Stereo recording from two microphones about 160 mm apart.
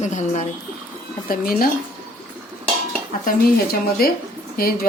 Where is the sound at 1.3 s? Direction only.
65° left (ahead or behind).